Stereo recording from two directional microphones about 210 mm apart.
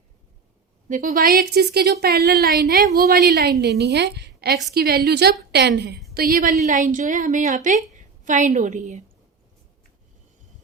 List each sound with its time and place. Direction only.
0.9 s speech: 40° right (ahead or behind)
6.1 s a woman's voice: 40° right (ahead or behind)